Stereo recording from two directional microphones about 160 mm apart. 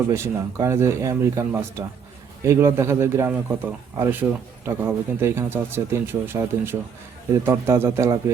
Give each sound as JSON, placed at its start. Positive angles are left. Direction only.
{"t": 0.1, "sound": "speech", "side_deg": -15}